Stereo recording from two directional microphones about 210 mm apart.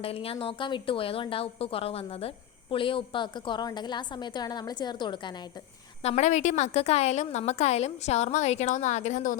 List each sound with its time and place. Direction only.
0.0 s a woman's voice: 25° left (ahead or behind)
6.0 s a woman's voice: 30° left (ahead or behind)